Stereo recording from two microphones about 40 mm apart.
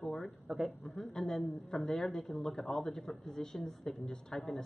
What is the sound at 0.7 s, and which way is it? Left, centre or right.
A man's voice, centre.